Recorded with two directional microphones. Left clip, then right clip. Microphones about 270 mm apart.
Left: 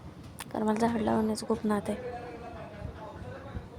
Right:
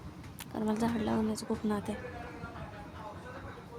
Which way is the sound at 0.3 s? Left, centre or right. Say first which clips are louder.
Left 5 dB; centre.